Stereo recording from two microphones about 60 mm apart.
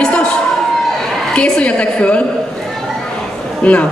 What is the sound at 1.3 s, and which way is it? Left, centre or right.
Speech, centre.